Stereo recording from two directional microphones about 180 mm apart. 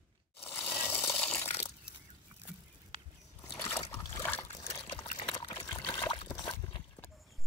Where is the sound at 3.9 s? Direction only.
20° left (ahead or behind).